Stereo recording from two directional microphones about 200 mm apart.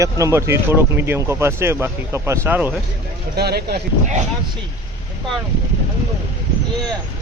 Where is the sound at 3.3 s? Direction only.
55° right (ahead or behind).